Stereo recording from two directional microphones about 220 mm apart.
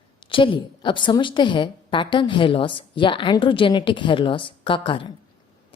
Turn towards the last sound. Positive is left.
turn(degrees=25)  # may be behind; listen again after turning